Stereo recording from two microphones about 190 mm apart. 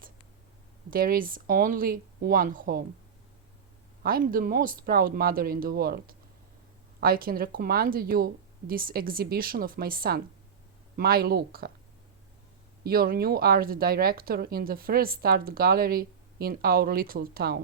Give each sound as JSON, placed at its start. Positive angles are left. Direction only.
{"t": 0.9, "sound": "speech", "side_deg": -50}
{"t": 4.0, "sound": "speech", "side_deg": -50}
{"t": 12.8, "sound": "speech", "side_deg": -50}